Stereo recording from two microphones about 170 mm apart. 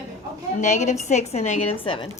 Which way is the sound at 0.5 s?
45° left (ahead or behind).